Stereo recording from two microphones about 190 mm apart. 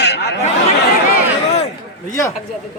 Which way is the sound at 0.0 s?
60° left (ahead or behind).